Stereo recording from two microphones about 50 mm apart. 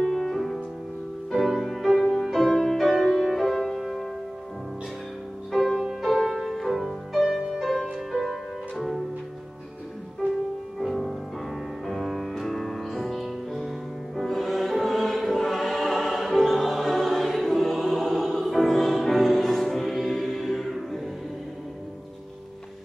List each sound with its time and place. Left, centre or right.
0.0 s music: centre
5.5 s music: centre
5.8 s music: centre
10.2 s music: right
10.9 s music: centre